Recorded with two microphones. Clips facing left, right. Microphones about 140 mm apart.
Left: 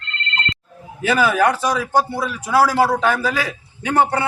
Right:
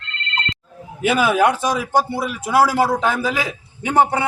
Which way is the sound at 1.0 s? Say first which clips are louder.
Right 1 dB; 15° right (ahead or behind).